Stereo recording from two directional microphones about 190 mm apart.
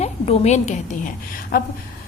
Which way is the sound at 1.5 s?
50° left (ahead or behind).